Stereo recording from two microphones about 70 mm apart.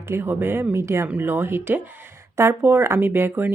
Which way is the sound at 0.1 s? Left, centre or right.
Right.